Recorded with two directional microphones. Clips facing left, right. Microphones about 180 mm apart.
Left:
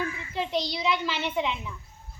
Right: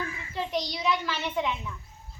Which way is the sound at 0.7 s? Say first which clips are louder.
Left 1 dB; 20° left (ahead or behind).